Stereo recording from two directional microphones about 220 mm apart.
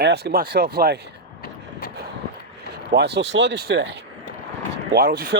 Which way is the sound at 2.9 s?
50° right (ahead or behind).